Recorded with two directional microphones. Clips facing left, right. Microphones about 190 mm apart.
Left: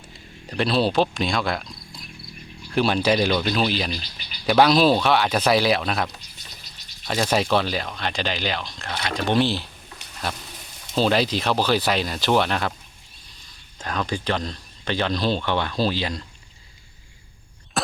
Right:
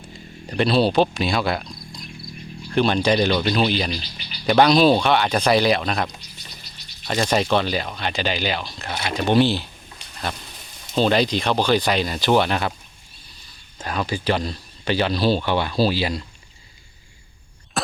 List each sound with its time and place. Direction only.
0.4 s speech: centre (ahead or behind)
7.1 s speech: 5° left (ahead or behind)
10.9 s speech: 5° left (ahead or behind)
13.7 s speech: 5° right (ahead or behind)
17.7 s a sound: centre (ahead or behind)